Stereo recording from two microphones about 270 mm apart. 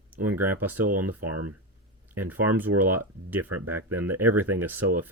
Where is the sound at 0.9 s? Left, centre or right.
Right.